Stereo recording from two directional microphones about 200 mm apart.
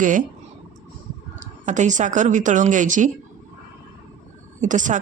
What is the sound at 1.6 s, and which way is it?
Speech, 35° right (ahead or behind).